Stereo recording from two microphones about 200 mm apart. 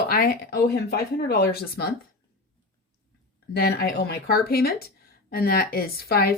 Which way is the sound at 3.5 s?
50° left (ahead or behind).